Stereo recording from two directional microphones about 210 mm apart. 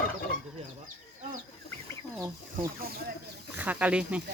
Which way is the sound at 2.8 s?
45° right (ahead or behind).